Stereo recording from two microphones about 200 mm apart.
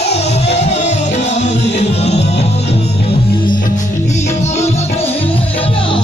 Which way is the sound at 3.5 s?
40° left (ahead or behind).